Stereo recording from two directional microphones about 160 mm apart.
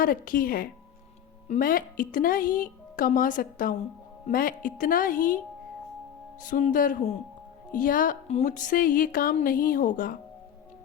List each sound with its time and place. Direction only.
0.0 s speech: 60° left (ahead or behind)
6.4 s speech: 55° left (ahead or behind)